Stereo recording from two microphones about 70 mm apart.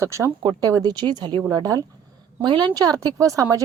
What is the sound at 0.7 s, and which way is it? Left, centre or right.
Speech, right.